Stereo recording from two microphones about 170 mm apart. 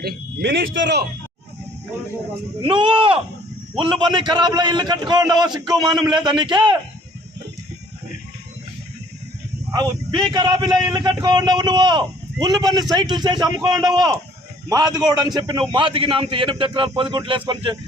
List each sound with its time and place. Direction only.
0.0 s speech: 75° right (ahead or behind)
2.6 s a man's voice: 30° right (ahead or behind)
9.7 s a man's voice: 25° right (ahead or behind)